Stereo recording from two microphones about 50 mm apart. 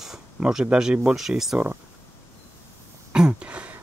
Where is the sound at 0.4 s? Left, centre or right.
Centre.